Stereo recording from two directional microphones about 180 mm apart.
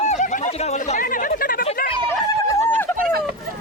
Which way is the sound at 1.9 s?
20° left (ahead or behind).